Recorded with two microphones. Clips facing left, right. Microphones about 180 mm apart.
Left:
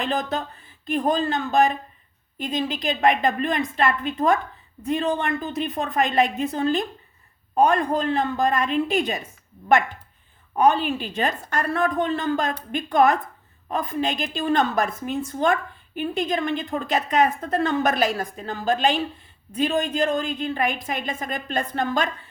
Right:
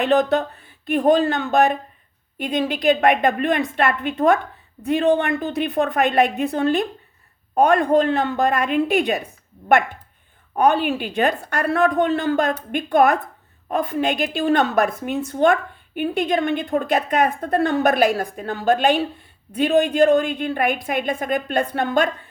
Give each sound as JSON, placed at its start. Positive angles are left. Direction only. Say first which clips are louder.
{"t": 0.0, "sound": "a woman's voice", "louder": "right 8 dB", "side_deg": -65}
{"t": 10.5, "sound": "a woman's voice", "louder": "right 2 dB", "side_deg": -60}